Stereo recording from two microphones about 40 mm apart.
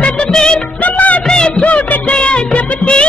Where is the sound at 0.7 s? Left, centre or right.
Left.